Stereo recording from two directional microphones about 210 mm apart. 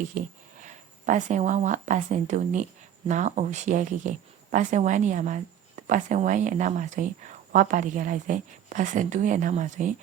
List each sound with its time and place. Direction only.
0.6 s speech: 35° right (ahead or behind)